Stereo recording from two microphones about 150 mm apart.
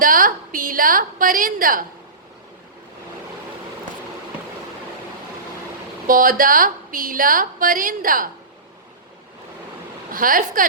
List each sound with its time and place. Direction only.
0.0 s a sound: 65° right (ahead or behind)
6.1 s a woman's voice: 65° right (ahead or behind)
10.1 s a woman's voice: 70° right (ahead or behind)